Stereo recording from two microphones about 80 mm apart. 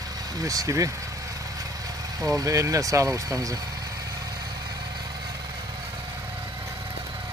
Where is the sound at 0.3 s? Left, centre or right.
Right.